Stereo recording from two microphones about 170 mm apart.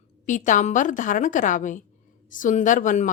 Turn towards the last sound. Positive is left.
turn(degrees=45)  # may be behind; listen again after turning